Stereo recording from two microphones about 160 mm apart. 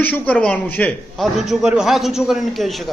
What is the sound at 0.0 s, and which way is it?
A man's voice, 10° left (ahead or behind).